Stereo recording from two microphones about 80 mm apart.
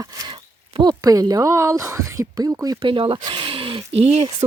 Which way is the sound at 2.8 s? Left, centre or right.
Right.